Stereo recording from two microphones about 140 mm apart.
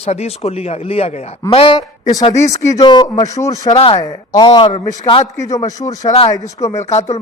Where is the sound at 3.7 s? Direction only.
45° left (ahead or behind).